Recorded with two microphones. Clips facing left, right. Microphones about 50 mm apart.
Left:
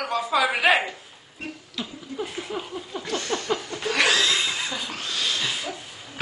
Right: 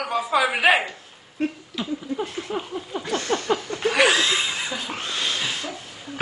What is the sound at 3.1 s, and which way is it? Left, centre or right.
Chuckle, right.